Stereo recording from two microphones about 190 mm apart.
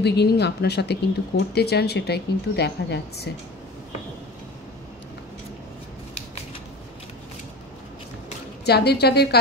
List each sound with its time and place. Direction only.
0.0 s speech: 60° left (ahead or behind)
8.6 s speech: 60° left (ahead or behind)